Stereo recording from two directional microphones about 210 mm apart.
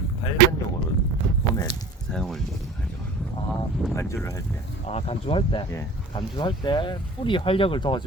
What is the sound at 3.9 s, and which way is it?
Speech, 10° left (ahead or behind).